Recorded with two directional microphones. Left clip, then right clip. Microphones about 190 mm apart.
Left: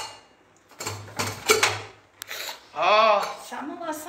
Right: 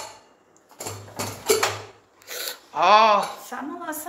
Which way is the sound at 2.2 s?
60° right (ahead or behind).